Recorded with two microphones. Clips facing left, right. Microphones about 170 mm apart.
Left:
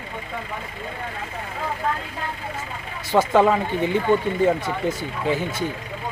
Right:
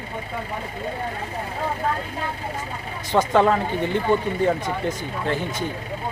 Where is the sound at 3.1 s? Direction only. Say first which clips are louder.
Left 1 dB; 5° left (ahead or behind).